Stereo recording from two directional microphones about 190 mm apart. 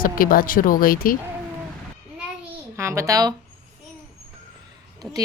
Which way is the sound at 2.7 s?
15° right (ahead or behind).